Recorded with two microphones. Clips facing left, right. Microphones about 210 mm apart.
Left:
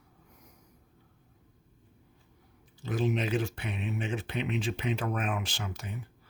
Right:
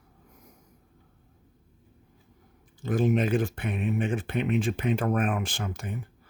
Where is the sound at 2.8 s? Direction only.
50° right (ahead or behind).